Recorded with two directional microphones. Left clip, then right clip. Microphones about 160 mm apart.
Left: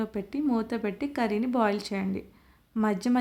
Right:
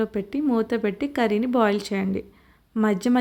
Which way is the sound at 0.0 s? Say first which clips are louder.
Right 6 dB; 20° right (ahead or behind).